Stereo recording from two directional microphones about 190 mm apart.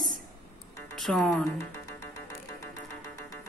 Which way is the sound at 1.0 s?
Centre (ahead or behind).